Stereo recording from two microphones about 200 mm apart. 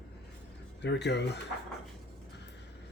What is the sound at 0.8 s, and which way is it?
Speech, 60° left (ahead or behind).